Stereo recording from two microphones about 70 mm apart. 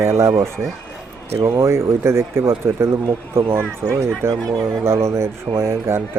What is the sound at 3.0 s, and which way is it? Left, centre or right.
Speech, right.